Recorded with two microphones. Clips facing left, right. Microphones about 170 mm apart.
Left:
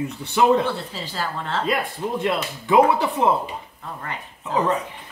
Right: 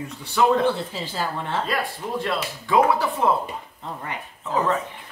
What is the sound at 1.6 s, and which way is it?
Speech, 20° left (ahead or behind).